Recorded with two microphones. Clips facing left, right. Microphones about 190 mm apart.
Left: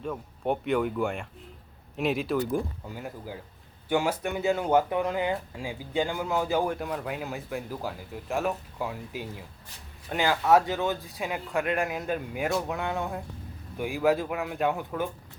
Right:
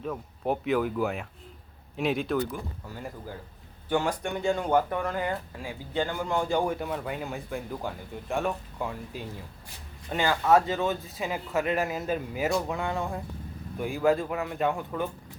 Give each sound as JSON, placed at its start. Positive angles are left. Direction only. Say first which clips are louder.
{"t": 0.0, "sound": "speech", "louder": "even", "side_deg": 0}
{"t": 2.8, "sound": "speech", "louder": "left 1 dB", "side_deg": 15}